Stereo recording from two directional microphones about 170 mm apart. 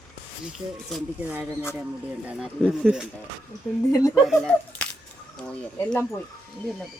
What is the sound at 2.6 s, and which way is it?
Speech, 5° right (ahead or behind).